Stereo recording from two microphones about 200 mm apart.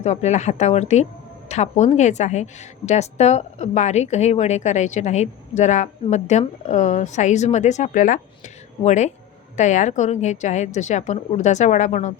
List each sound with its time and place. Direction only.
0.0 s a woman's voice: 35° left (ahead or behind)